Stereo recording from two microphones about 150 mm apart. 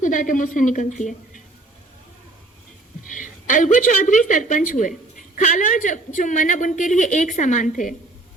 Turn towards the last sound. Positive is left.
turn(degrees=60)  # may be behind; listen again after turning